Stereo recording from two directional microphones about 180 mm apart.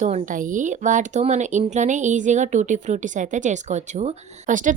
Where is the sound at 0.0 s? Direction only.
40° right (ahead or behind).